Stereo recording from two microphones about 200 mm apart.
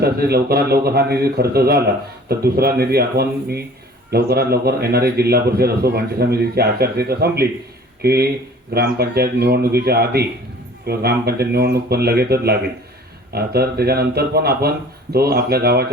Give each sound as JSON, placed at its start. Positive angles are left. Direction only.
{"t": 0.0, "sound": "a man's voice", "side_deg": -50}